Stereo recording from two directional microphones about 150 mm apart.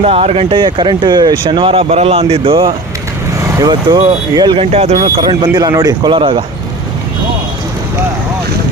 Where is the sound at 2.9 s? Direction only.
20° right (ahead or behind).